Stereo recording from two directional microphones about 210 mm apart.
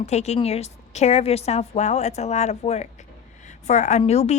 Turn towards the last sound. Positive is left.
turn(degrees=30)  # may be behind; listen again after turning